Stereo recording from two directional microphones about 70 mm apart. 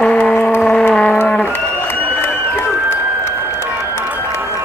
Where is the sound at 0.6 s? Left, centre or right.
Centre.